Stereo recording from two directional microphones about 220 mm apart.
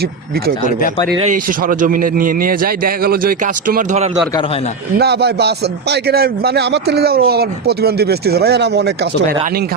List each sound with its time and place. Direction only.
1.3 s a man's voice: 35° right (ahead or behind)
4.9 s a man's voice: 45° right (ahead or behind)